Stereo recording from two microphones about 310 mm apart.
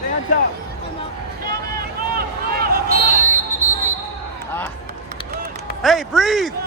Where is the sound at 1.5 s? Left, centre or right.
Right.